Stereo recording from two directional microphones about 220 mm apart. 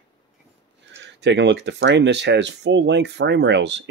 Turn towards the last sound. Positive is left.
turn(degrees=-55)  # may be behind; listen again after turning